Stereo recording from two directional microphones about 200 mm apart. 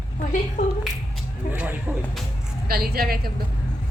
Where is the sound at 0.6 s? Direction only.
35° left (ahead or behind).